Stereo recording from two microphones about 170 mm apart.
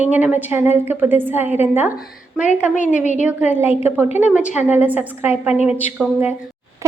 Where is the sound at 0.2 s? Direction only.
10° right (ahead or behind).